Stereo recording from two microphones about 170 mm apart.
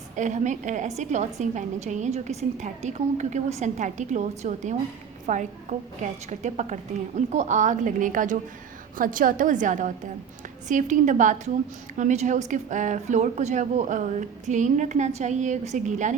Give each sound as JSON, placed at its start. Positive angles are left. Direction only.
{"t": 0.2, "sound": "a woman's voice", "side_deg": -45}